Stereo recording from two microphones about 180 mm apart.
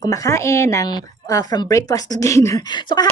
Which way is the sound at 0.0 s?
20° left (ahead or behind).